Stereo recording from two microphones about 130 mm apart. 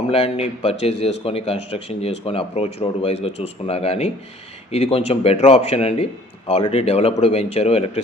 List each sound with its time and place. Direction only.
0.1 s a man's voice: 50° left (ahead or behind)